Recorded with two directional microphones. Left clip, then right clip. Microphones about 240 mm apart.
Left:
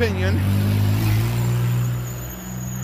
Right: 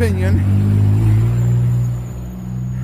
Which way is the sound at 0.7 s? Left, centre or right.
Left.